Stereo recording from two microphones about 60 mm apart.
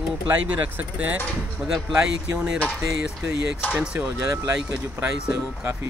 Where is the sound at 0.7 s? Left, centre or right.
Right.